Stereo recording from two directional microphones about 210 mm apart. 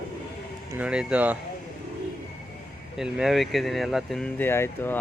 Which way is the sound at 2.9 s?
5° right (ahead or behind).